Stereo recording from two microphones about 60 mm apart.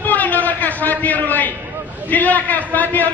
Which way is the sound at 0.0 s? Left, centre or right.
Left.